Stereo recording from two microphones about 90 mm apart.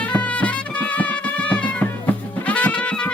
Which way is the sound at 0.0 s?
15° left (ahead or behind).